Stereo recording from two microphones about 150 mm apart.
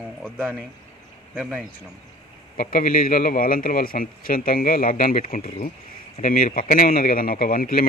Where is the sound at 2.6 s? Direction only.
65° left (ahead or behind).